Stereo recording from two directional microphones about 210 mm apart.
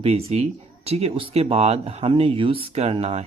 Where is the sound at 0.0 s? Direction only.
30° right (ahead or behind).